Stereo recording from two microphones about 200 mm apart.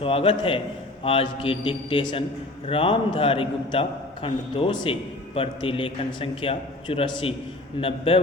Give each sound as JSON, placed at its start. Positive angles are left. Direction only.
{"t": 0.0, "sound": "a man's voice", "side_deg": 30}